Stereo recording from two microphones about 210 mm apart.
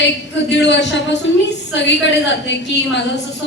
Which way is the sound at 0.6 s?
55° left (ahead or behind).